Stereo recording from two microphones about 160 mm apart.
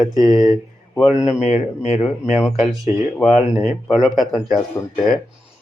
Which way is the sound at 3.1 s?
Centre (ahead or behind).